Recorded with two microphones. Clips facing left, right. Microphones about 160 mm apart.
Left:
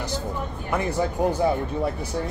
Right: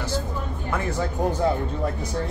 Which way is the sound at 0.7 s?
15° left (ahead or behind).